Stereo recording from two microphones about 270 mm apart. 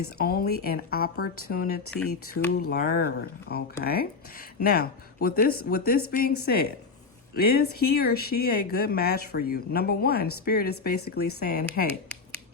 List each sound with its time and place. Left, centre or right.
0.0 s speech: left
2.0 s speech: left
2.5 s speech: left